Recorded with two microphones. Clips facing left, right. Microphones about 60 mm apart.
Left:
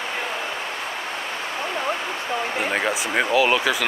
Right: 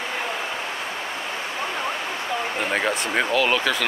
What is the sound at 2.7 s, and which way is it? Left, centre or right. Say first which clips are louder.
Speech: right 2 dB; centre.